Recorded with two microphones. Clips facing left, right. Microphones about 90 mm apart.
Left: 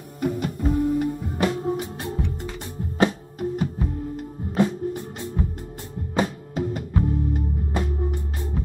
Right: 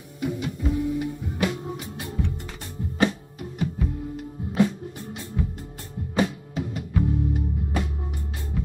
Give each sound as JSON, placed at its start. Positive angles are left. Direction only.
{"t": 0.2, "sound": "music", "side_deg": 45}
{"t": 5.4, "sound": "music", "side_deg": 35}